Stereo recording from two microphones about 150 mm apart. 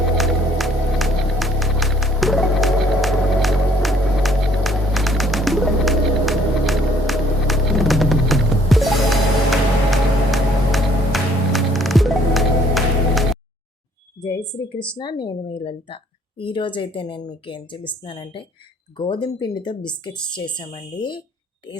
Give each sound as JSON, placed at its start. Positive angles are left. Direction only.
{"t": 0.2, "sound": "music", "side_deg": 0}
{"t": 14.2, "sound": "a sound", "side_deg": 25}
{"t": 14.7, "sound": "a woman's voice", "side_deg": 35}